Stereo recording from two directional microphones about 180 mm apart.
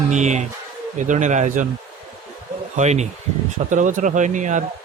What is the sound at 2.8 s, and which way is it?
A man's voice, 40° right (ahead or behind).